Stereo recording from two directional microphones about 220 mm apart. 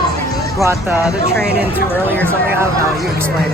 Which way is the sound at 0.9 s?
5° right (ahead or behind).